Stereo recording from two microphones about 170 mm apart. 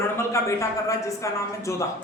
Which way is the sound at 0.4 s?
15° left (ahead or behind).